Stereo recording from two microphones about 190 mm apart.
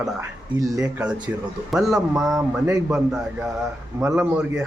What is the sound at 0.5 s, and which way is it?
Speech, 15° right (ahead or behind).